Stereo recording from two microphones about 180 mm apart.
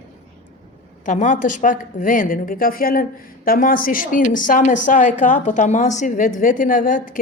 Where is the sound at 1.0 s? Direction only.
45° left (ahead or behind).